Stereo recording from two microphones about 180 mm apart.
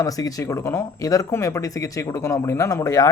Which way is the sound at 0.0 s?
20° left (ahead or behind).